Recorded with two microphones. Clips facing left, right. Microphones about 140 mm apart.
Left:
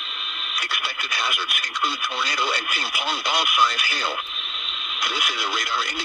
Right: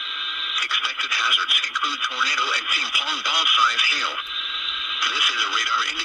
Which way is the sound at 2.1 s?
25° left (ahead or behind).